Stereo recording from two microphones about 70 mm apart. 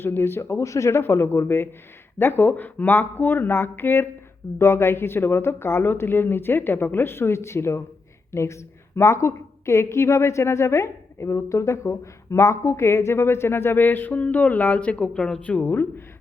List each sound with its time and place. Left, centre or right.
0.0 s a woman's voice: left; by 15.4 s centre
15.4 s speech: left